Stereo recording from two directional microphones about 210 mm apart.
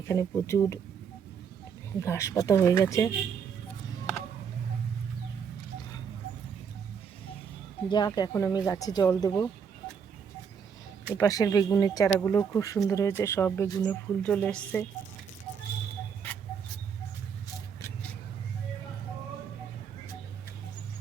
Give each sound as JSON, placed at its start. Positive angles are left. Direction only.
{"t": 0.1, "sound": "speech", "side_deg": 15}
{"t": 2.0, "sound": "speech", "side_deg": 15}
{"t": 7.9, "sound": "speech", "side_deg": 20}
{"t": 11.2, "sound": "speech", "side_deg": 15}